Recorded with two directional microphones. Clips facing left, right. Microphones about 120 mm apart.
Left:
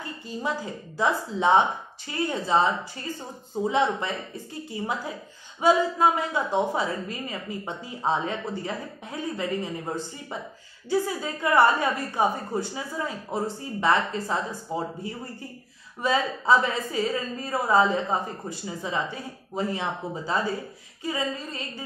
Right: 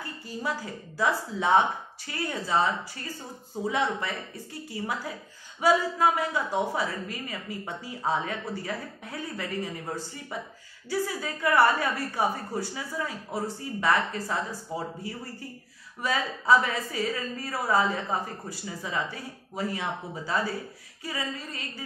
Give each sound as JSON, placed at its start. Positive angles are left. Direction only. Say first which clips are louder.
{"t": 0.0, "sound": "a woman's voice", "louder": "left 2 dB", "side_deg": 20}